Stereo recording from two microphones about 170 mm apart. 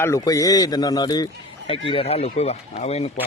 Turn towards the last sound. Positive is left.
turn(degrees=35)  # may be behind; listen again after turning